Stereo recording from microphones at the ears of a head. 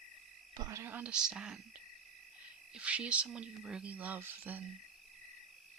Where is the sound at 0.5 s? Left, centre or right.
Right.